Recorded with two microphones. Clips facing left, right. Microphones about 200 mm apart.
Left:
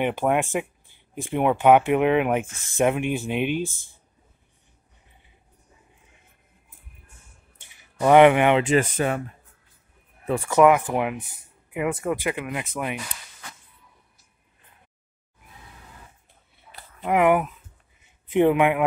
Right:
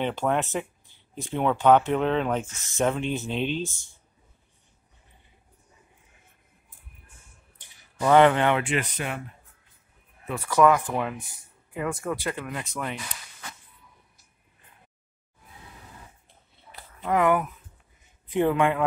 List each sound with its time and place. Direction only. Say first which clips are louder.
0.0 s speech: left 3 dB; 15° left (ahead or behind)
7.7 s speech: left 3 dB; 15° left (ahead or behind)
8.6 s speech: left 8 dB; 40° left (ahead or behind)
10.2 s speech: left 6 dB; 30° left (ahead or behind)
10.9 s speech: left 4 dB; 15° left (ahead or behind)
17.0 s speech: left 3 dB; 20° left (ahead or behind)